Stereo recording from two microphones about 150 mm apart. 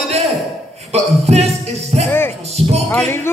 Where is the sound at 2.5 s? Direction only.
45° right (ahead or behind).